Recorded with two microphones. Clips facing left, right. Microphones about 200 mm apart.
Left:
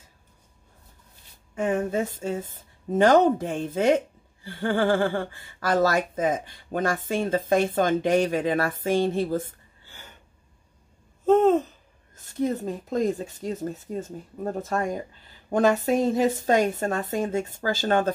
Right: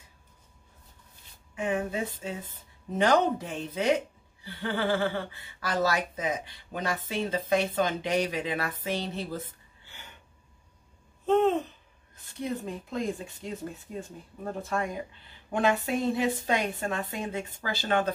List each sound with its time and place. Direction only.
1.5 s speech: 45° left (ahead or behind)
12.2 s speech: 45° left (ahead or behind)